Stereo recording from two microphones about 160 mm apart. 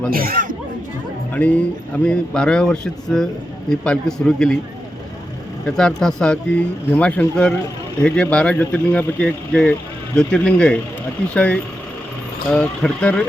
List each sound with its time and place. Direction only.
0.1 s speech: 65° right (ahead or behind)
1.3 s speech: 10° left (ahead or behind)
5.6 s speech: 5° left (ahead or behind)